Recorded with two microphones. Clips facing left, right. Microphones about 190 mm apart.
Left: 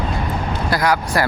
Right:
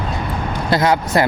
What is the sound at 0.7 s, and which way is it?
Speech, 25° right (ahead or behind).